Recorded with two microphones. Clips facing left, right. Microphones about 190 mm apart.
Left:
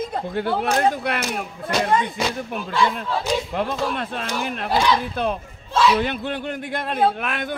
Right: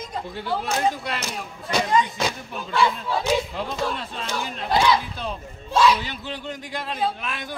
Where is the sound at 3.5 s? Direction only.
55° left (ahead or behind).